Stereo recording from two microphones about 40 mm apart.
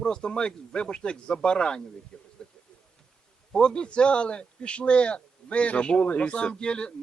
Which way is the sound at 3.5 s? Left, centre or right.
Left.